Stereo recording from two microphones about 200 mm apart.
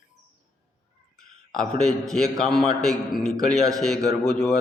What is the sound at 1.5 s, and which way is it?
A man's voice, 5° left (ahead or behind).